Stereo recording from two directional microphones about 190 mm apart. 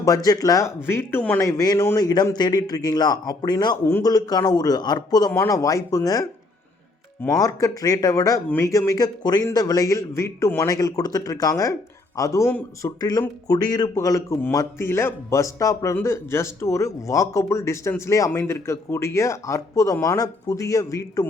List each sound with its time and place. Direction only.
0.0 s speech: 20° left (ahead or behind)
7.3 s speech: 20° left (ahead or behind)